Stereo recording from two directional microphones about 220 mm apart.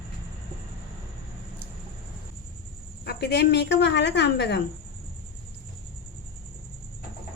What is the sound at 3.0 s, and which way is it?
Speech, 50° left (ahead or behind).